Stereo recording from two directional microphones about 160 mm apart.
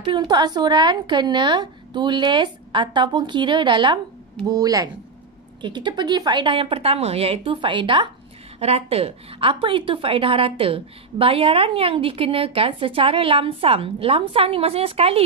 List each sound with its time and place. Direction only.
0.0 s a woman's voice: 30° right (ahead or behind)